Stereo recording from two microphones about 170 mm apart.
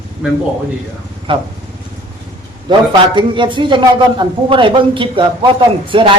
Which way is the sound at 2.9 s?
30° right (ahead or behind).